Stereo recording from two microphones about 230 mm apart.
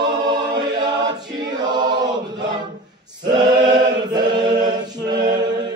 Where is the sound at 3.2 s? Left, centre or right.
Centre.